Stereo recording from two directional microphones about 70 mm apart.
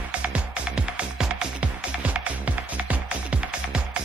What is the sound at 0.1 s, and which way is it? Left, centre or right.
Music, centre.